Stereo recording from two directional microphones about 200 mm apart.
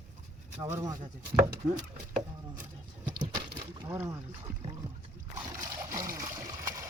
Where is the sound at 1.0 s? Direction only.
40° right (ahead or behind).